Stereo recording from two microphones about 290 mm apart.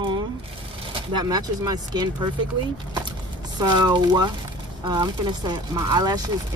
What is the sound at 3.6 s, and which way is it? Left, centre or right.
Speech, centre.